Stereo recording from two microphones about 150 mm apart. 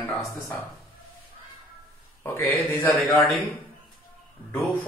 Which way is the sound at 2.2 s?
15° left (ahead or behind).